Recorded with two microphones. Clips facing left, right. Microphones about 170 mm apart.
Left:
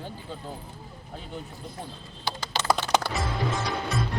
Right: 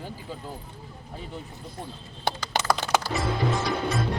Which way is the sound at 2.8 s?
50° right (ahead or behind).